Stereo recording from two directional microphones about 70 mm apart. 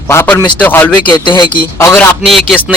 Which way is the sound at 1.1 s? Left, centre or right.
Left.